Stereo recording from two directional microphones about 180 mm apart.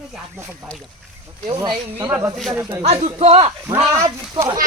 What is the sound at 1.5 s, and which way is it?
Speech, 25° right (ahead or behind).